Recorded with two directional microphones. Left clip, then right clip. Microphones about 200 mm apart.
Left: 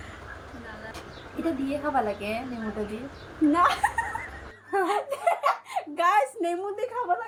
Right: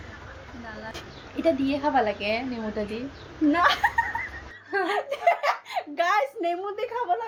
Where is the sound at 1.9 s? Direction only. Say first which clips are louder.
Right 2 dB; 20° right (ahead or behind).